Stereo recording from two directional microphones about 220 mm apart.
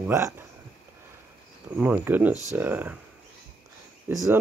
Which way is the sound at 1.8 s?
10° right (ahead or behind).